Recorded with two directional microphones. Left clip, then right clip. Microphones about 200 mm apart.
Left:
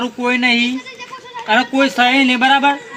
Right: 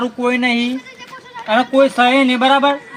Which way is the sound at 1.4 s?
20° right (ahead or behind).